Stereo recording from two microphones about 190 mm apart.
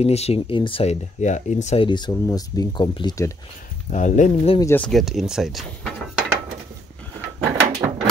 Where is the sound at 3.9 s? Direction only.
40° left (ahead or behind).